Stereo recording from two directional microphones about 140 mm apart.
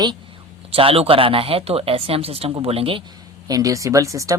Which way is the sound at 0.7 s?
40° right (ahead or behind).